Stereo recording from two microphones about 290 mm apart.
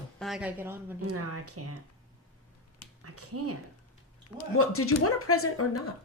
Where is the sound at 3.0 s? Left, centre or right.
Right.